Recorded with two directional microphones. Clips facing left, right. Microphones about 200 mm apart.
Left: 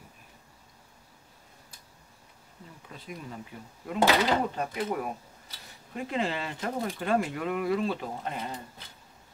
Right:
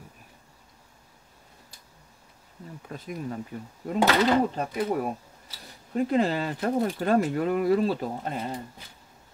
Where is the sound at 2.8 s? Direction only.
50° right (ahead or behind).